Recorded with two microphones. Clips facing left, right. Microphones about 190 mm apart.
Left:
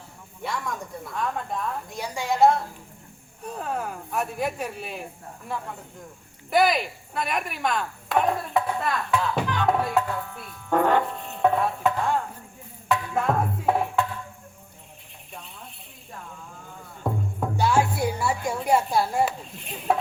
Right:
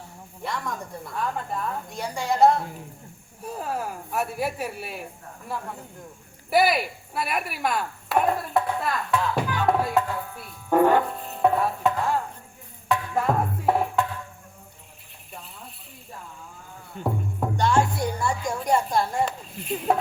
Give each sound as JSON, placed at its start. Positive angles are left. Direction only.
{"t": 0.4, "sound": "speech", "side_deg": 0}
{"t": 6.5, "sound": "chopping", "side_deg": -5}
{"t": 12.9, "sound": "music", "side_deg": 0}
{"t": 17.0, "sound": "music", "side_deg": -70}
{"t": 17.6, "sound": "music", "side_deg": 5}
{"t": 18.4, "sound": "a woman's voice", "side_deg": 5}